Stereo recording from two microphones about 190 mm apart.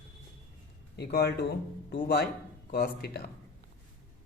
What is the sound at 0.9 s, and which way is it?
A man's voice, 60° left (ahead or behind).